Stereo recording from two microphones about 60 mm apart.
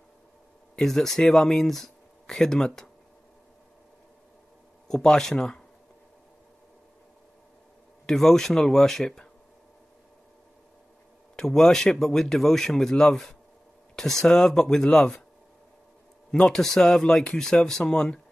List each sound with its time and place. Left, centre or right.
0.7 s speech: centre
4.8 s speech: centre
8.1 s speech: centre
11.3 s speech: centre
16.3 s speech: centre